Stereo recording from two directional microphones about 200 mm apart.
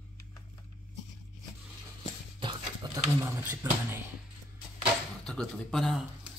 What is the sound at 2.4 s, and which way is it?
Speech, 15° right (ahead or behind).